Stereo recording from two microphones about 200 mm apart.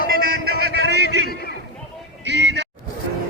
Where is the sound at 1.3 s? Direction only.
50° left (ahead or behind).